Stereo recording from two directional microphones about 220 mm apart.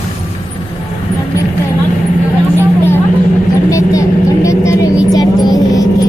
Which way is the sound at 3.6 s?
15° left (ahead or behind).